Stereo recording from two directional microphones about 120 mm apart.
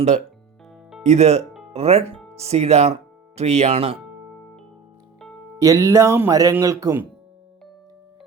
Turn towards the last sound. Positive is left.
turn(degrees=-25)  # may be behind; listen again after turning